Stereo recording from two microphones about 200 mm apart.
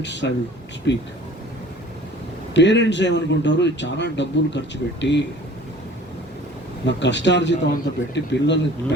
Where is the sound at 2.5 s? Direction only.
60° left (ahead or behind).